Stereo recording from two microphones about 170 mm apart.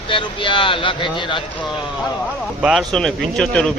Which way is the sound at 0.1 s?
30° left (ahead or behind).